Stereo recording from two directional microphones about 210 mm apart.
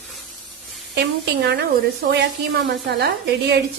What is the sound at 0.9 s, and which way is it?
A woman's voice, 55° right (ahead or behind).